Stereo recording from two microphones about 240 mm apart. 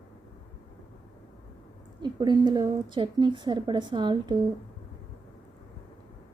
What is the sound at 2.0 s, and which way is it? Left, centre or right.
A woman's voice, centre.